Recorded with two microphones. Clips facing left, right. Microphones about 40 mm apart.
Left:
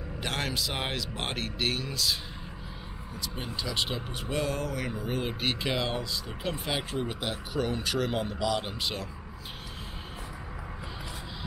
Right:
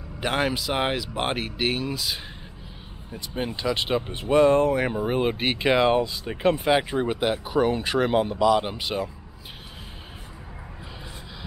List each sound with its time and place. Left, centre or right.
0.2 s speech: centre
3.2 s speech: right